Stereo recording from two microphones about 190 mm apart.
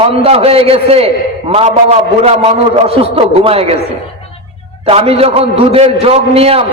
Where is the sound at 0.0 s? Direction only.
30° right (ahead or behind).